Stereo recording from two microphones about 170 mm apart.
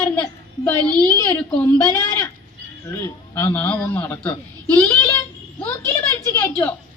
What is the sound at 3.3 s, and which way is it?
A child's voice, 10° left (ahead or behind).